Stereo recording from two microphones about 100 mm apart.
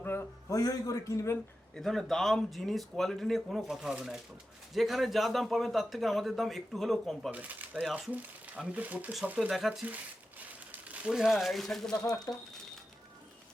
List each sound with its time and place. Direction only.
0.0 s a sound: 25° left (ahead or behind)
0.5 s a man's voice: 35° left (ahead or behind)
1.7 s a man's voice: 5° left (ahead or behind)
7.3 s speech: 15° right (ahead or behind)
9.5 s a man's voice: 5° right (ahead or behind)
10.7 s speech: 15° right (ahead or behind); by 12.1 s 5° left (ahead or behind)
12.3 s crumpling: 5° left (ahead or behind)